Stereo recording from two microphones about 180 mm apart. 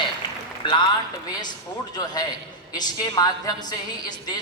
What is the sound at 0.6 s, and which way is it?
Speech, 25° left (ahead or behind).